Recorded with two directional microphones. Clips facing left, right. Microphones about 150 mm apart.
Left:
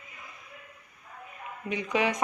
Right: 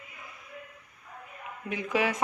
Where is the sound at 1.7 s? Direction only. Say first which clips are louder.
Left 1 dB; 5° right (ahead or behind).